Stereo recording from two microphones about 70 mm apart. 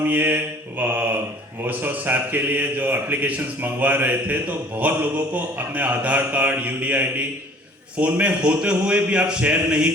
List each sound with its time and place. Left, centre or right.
0.0 s a man's voice: right